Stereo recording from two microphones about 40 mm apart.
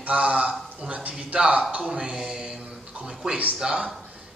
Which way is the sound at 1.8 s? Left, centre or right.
Centre.